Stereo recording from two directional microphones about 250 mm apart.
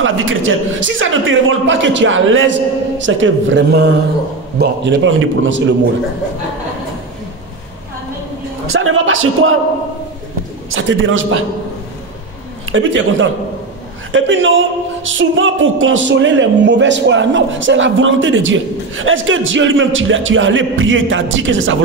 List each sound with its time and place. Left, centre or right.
0.0 s speech: right
8.7 s speech: right
10.7 s speech: right
12.7 s speech: right